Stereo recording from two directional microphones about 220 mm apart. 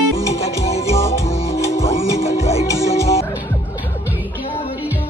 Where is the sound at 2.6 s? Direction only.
15° left (ahead or behind).